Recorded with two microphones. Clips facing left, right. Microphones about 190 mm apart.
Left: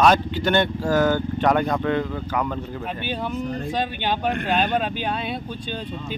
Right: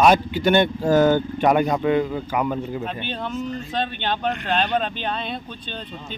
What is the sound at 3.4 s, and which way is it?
Speech, 60° left (ahead or behind).